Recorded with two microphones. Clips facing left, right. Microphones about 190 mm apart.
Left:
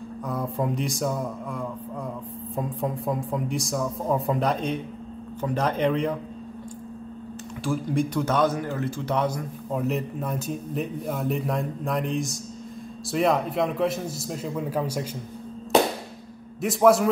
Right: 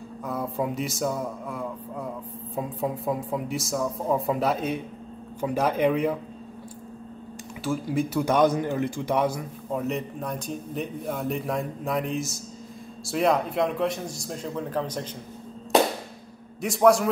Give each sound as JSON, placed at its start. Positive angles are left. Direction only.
{"t": 0.2, "sound": "speech", "side_deg": 0}
{"t": 7.6, "sound": "speech", "side_deg": -5}
{"t": 16.6, "sound": "speech", "side_deg": 0}